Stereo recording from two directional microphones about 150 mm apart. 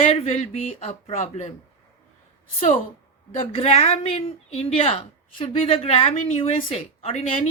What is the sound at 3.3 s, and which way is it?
Speech, 40° left (ahead or behind).